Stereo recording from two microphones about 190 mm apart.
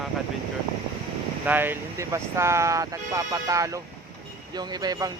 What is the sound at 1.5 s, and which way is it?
Speech, 10° right (ahead or behind).